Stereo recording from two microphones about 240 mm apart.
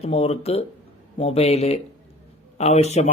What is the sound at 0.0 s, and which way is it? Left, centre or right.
A man's voice, left.